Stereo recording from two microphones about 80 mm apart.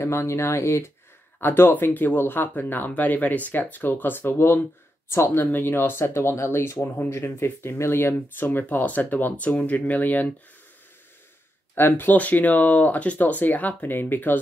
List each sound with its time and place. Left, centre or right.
0.0 s speech: left
11.7 s speech: left